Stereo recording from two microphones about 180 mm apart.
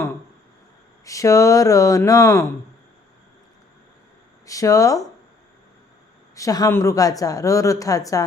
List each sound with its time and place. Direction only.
1.0 s speech: 20° left (ahead or behind)
4.4 s speech: 20° left (ahead or behind)
6.3 s speech: 20° left (ahead or behind)